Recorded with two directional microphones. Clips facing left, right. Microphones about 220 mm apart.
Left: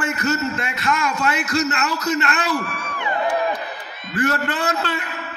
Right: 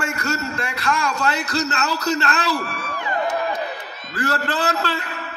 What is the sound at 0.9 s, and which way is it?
A man's voice, 35° right (ahead or behind).